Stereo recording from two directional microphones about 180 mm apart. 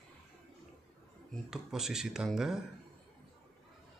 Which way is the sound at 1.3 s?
5° right (ahead or behind).